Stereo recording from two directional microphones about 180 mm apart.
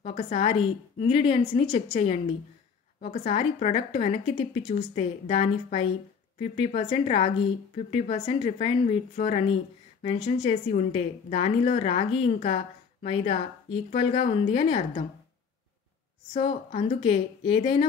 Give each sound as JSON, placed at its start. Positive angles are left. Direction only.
{"t": 0.0, "sound": "a woman's voice", "side_deg": 30}
{"t": 16.3, "sound": "a woman's voice", "side_deg": 30}